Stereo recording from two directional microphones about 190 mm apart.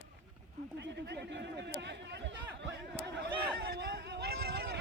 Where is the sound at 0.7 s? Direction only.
65° right (ahead or behind).